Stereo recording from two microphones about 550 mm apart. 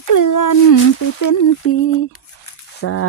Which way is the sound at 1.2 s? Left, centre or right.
Left.